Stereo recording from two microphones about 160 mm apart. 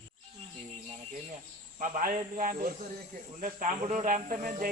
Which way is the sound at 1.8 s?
55° right (ahead or behind).